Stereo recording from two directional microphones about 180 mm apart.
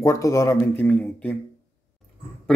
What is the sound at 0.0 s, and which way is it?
Speech, 15° left (ahead or behind).